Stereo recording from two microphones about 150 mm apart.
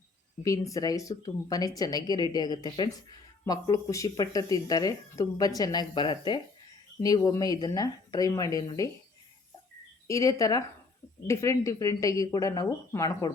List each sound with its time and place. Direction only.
0.4 s speech: 20° left (ahead or behind)
10.1 s speech: 20° left (ahead or behind)